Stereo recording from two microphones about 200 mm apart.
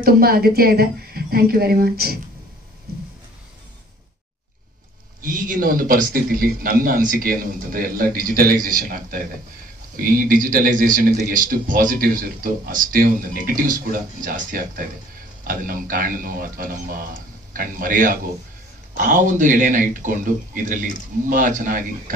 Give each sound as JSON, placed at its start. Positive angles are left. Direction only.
{"t": 0.0, "sound": "a man's voice", "side_deg": -50}
{"t": 5.2, "sound": "a man's voice", "side_deg": -45}